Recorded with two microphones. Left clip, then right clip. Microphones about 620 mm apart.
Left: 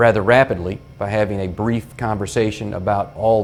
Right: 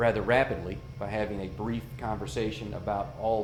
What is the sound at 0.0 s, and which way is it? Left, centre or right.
Speech, left.